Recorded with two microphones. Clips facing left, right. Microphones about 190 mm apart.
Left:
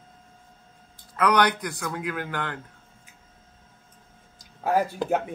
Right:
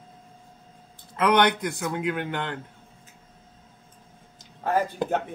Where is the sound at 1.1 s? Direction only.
25° right (ahead or behind).